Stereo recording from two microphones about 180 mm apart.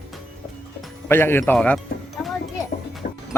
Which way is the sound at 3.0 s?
50° left (ahead or behind).